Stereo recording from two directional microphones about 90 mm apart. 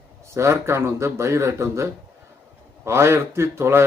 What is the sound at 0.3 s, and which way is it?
Speech, 30° right (ahead or behind).